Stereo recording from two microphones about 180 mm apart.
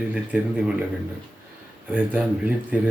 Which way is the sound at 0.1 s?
5° right (ahead or behind).